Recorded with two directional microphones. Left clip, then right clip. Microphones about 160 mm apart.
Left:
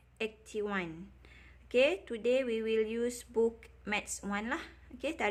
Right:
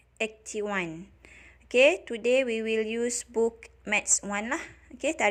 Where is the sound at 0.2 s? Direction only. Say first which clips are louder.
Right 5 dB; 25° right (ahead or behind).